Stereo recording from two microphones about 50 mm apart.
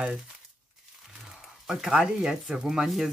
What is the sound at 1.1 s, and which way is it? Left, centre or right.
Speech, centre.